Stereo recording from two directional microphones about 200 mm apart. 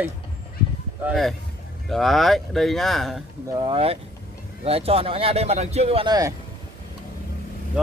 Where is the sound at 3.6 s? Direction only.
25° right (ahead or behind).